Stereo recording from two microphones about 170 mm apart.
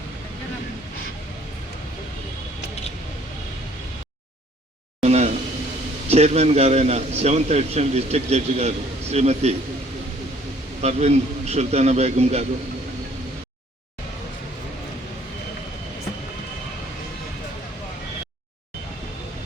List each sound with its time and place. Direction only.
4.9 s a sound: 40° right (ahead or behind)
6.1 s a man's voice: 40° right (ahead or behind)
10.8 s a man's voice: 40° right (ahead or behind)